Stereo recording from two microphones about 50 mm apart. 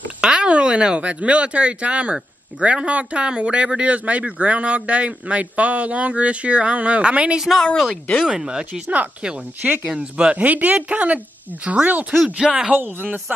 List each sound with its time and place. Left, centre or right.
0.2 s speech: centre
8.8 s speech: right
9.9 s speech: centre
12.4 s speech: centre
12.7 s speech: right